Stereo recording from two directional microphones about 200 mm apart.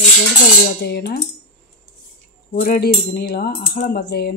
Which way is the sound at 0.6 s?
55° left (ahead or behind).